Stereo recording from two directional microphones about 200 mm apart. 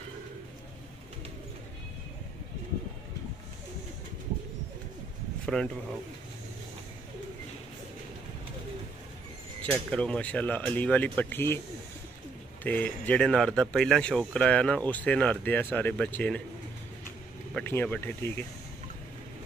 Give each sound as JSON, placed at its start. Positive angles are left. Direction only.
{"t": 5.4, "sound": "speech", "side_deg": 5}
{"t": 9.6, "sound": "speech", "side_deg": 5}
{"t": 12.6, "sound": "speech", "side_deg": 10}
{"t": 17.6, "sound": "speech", "side_deg": 10}